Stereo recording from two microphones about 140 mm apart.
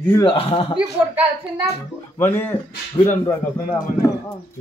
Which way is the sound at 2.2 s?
15° left (ahead or behind).